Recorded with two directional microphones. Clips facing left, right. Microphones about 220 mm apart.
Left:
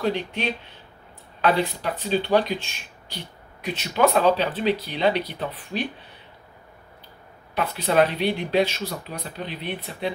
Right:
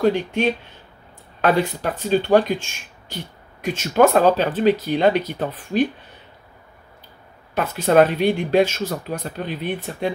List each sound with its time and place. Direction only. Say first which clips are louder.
0.0 s speech: right 7 dB; 45° right (ahead or behind)
7.5 s speech: right 5 dB; 50° right (ahead or behind)